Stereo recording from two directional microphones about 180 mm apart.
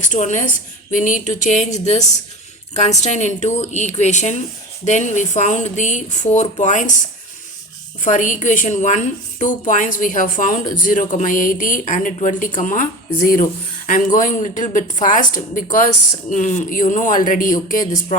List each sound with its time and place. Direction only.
0.0 s a woman's voice: 45° left (ahead or behind)
8.0 s a woman's voice: 45° left (ahead or behind)